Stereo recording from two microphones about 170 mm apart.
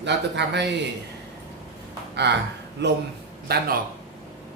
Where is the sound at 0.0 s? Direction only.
90° right.